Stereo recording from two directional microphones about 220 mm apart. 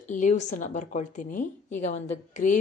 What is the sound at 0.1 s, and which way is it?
A woman's voice, 35° left (ahead or behind).